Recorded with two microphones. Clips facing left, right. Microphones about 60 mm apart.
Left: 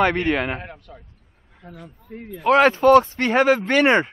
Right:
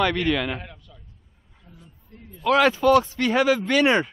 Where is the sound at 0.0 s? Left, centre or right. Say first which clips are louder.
Left 3 dB; left.